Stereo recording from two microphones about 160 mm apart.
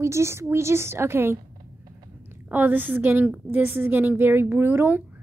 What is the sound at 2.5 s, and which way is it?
A woman's voice, 10° right (ahead or behind).